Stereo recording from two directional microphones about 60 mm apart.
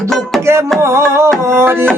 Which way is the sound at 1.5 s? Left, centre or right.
Right.